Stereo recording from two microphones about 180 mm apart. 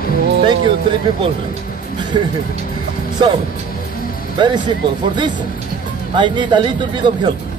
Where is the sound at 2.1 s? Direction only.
25° right (ahead or behind).